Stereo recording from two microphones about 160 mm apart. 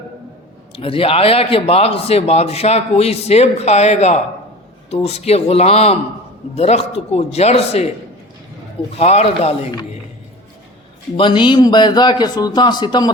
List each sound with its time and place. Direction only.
0.8 s speech: 35° left (ahead or behind)
9.0 s speech: 40° left (ahead or behind)
11.2 s speech: 30° left (ahead or behind)